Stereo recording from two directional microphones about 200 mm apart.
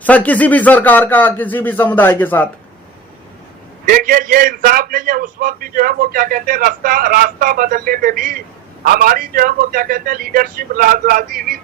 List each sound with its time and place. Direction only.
0.0 s speech: 10° left (ahead or behind)
3.8 s a man's voice: 45° right (ahead or behind)